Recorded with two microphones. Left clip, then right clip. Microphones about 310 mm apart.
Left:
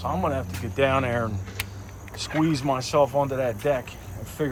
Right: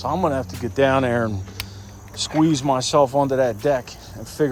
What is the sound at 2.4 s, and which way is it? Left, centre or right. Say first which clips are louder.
Speech: right 6 dB; centre.